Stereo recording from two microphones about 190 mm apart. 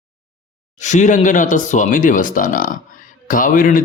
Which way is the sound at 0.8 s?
40° left (ahead or behind).